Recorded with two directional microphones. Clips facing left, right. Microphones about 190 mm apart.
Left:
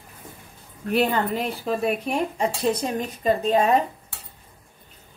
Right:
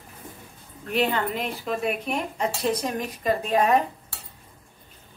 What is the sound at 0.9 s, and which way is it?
Speech, 40° left (ahead or behind).